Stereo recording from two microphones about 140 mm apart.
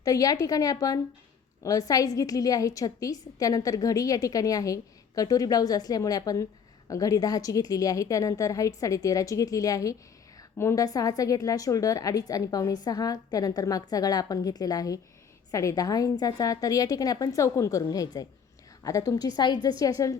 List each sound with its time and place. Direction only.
0.0 s a woman's voice: 25° left (ahead or behind)